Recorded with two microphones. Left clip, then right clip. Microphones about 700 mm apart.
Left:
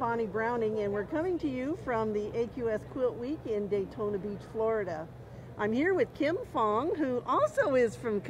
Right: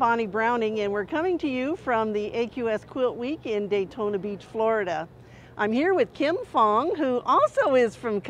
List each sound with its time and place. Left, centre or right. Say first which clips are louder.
0.0 s speech: right 8 dB; right